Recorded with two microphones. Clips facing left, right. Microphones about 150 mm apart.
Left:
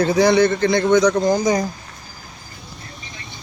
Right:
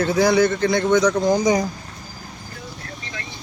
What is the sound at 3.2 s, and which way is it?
Vehicle, 90° right.